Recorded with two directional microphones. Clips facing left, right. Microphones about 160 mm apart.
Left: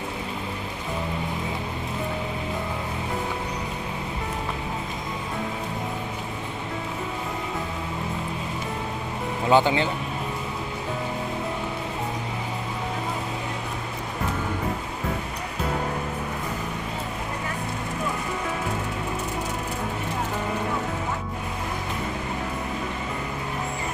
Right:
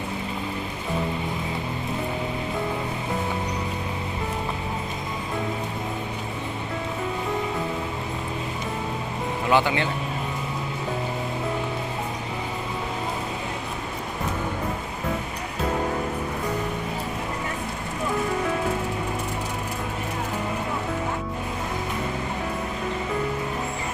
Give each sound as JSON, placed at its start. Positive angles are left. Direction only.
{"t": 9.5, "sound": "speech", "side_deg": 30}